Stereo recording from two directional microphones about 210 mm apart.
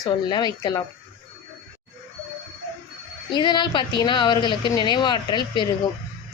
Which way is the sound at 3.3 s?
20° left (ahead or behind).